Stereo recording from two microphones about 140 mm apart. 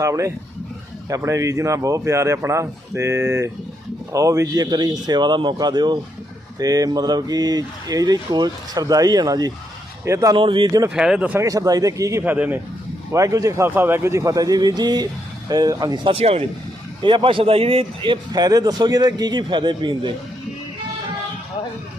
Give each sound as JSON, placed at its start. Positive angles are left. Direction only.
{"t": 0.0, "sound": "speech", "side_deg": -20}
{"t": 10.3, "sound": "speech", "side_deg": -35}
{"t": 10.8, "sound": "speech", "side_deg": -5}
{"t": 11.3, "sound": "speech", "side_deg": -25}
{"t": 12.2, "sound": "speech", "side_deg": -15}
{"t": 16.1, "sound": "speech", "side_deg": -45}